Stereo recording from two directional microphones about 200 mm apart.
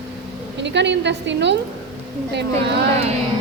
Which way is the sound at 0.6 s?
60° right (ahead or behind).